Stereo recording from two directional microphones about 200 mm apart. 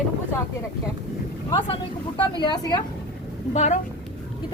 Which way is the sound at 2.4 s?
20° left (ahead or behind).